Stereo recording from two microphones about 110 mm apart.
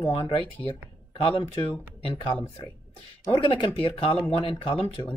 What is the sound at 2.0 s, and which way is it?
Speech, 60° left (ahead or behind).